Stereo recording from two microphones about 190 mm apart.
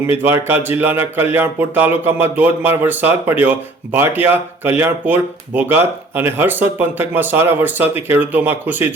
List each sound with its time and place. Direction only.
0.1 s speech: 10° right (ahead or behind)